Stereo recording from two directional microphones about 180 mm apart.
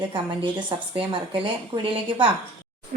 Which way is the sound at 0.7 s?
30° right (ahead or behind).